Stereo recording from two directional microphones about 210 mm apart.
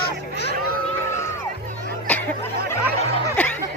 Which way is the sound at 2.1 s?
5° left (ahead or behind).